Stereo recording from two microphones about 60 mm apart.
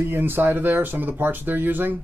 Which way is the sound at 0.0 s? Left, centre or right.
Right.